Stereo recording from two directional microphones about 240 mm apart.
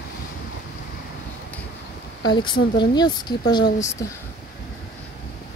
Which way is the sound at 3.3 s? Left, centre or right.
Left.